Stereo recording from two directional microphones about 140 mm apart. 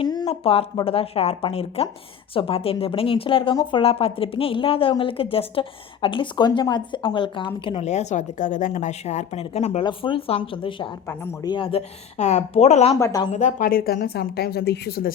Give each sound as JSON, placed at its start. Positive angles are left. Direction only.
{"t": 0.0, "sound": "a sound", "side_deg": 30}
{"t": 0.3, "sound": "a woman's voice", "side_deg": 40}
{"t": 9.8, "sound": "a woman's voice", "side_deg": 40}
{"t": 13.0, "sound": "speech", "side_deg": 25}
{"t": 13.3, "sound": "speech", "side_deg": 65}